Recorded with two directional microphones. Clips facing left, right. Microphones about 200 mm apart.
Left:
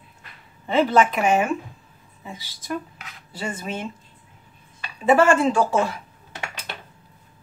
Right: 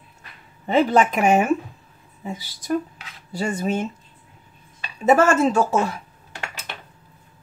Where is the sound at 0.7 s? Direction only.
40° right (ahead or behind).